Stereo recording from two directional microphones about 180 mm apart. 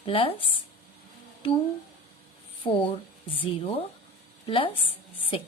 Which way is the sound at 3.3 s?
30° left (ahead or behind).